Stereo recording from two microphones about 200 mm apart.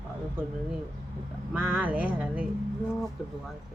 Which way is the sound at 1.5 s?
10° right (ahead or behind).